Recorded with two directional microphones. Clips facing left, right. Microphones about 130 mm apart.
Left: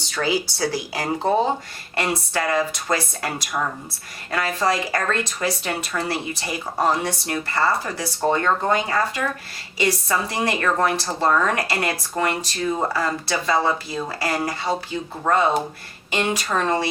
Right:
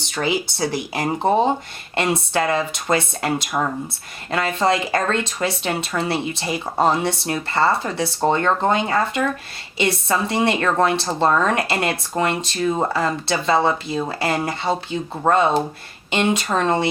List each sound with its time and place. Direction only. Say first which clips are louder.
0.0 s speech: right 1 dB; 20° right (ahead or behind)